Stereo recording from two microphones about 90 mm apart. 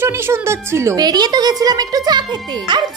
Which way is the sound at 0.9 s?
50° right (ahead or behind).